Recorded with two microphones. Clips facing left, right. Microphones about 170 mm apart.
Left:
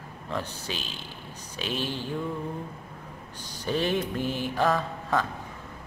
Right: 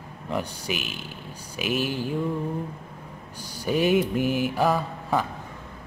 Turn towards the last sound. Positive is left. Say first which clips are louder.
# right 2 dB
turn(degrees=-10)  # may be behind; listen again after turning